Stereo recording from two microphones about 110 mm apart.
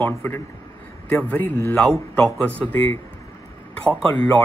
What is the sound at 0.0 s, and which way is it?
A man's voice, 20° left (ahead or behind).